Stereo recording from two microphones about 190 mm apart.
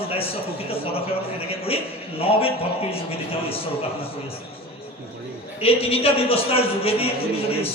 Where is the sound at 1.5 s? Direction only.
30° left (ahead or behind).